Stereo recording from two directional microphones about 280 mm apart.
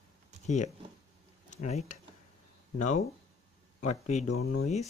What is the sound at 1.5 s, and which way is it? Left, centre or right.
Speech, left.